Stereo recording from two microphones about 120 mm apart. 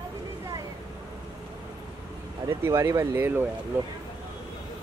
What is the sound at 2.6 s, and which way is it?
Speech, 20° right (ahead or behind).